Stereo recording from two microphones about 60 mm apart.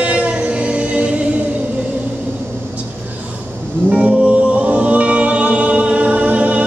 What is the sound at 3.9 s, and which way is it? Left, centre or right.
Music, right.